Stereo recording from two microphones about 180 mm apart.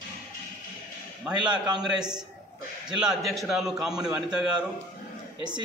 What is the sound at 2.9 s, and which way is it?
A man's voice, centre (ahead or behind).